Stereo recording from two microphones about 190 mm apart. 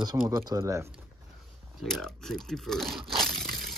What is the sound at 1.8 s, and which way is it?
Crumpling, centre (ahead or behind).